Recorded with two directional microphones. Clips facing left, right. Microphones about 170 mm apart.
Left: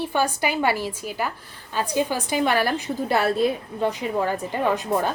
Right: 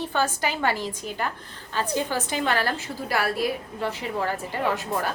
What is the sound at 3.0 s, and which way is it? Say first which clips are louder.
A woman's voice: left 4 dB; 25° left (ahead or behind).